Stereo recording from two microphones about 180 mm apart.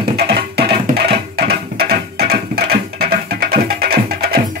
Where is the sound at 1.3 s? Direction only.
60° right (ahead or behind).